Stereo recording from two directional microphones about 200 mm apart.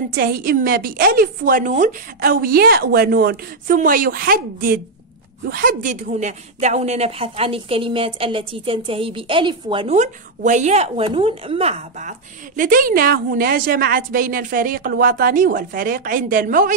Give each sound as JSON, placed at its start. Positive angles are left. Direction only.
{"t": 0.1, "sound": "a woman's voice", "side_deg": -45}